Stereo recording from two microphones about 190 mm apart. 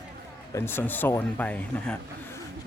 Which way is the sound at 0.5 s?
10° left (ahead or behind).